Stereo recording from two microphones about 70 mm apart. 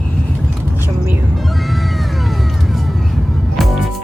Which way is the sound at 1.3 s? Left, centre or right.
Centre.